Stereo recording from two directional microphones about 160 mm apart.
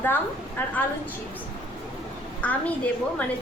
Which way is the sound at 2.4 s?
10° left (ahead or behind).